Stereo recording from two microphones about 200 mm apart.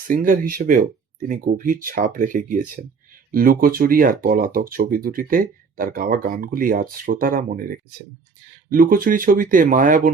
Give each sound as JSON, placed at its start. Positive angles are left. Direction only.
{"t": 0.1, "sound": "speech", "side_deg": -40}